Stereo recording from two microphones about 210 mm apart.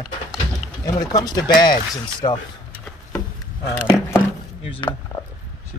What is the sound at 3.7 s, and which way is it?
Speech, 10° left (ahead or behind).